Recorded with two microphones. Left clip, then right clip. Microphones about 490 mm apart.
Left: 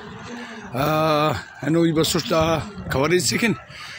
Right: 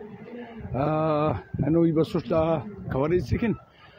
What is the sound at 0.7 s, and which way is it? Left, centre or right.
Speech, right.